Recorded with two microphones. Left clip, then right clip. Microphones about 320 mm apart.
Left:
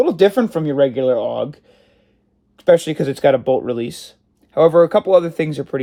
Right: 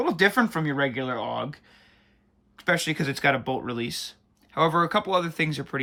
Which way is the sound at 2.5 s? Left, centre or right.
Centre.